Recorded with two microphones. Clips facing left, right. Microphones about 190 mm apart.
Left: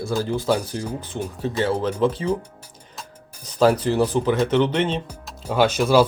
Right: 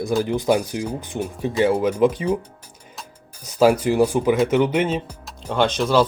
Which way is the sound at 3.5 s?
10° right (ahead or behind).